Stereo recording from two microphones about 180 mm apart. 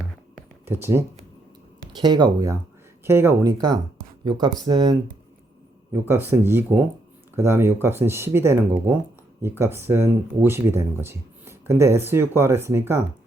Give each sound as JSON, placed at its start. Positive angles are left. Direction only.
{"t": 0.6, "sound": "speech", "side_deg": -10}